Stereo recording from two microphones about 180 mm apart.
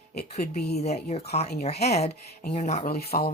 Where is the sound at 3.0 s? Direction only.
60° left (ahead or behind).